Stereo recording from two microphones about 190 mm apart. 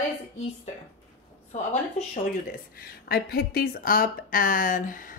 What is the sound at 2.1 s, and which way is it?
A woman's voice, 45° left (ahead or behind).